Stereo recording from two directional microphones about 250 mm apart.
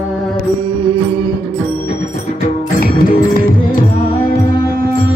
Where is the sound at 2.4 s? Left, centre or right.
Left.